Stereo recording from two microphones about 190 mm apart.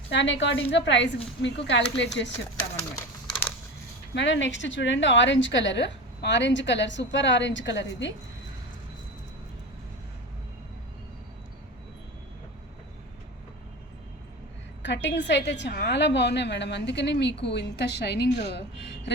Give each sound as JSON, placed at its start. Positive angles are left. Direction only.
{"t": 0.1, "sound": "a woman's voice", "side_deg": 70}
{"t": 4.1, "sound": "a woman's voice", "side_deg": 70}
{"t": 14.8, "sound": "a woman's voice", "side_deg": 70}